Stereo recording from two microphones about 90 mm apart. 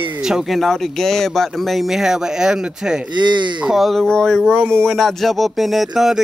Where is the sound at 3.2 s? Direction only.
60° right (ahead or behind).